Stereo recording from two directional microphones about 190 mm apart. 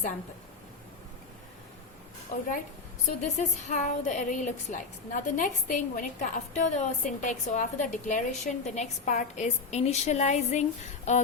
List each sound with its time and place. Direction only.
2.3 s a woman's voice: 45° left (ahead or behind)